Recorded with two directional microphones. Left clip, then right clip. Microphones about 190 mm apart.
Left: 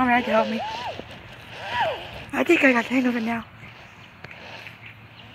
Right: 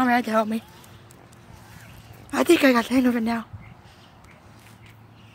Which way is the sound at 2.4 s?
35° right (ahead or behind).